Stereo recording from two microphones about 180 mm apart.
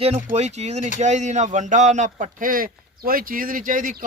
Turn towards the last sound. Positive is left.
turn(degrees=-45)  # may be behind; listen again after turning